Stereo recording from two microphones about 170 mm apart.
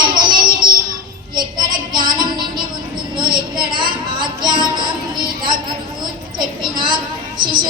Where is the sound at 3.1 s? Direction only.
25° right (ahead or behind).